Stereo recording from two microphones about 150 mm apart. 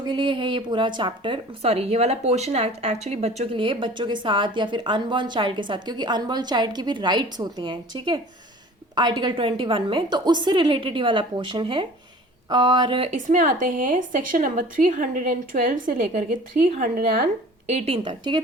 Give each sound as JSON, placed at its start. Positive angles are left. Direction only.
{"t": 0.0, "sound": "a woman's voice", "side_deg": -30}
{"t": 13.1, "sound": "speech", "side_deg": -55}
{"t": 17.7, "sound": "a woman's voice", "side_deg": -45}